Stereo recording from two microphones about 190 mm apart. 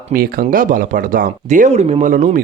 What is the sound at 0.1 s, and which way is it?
Speech, 50° right (ahead or behind).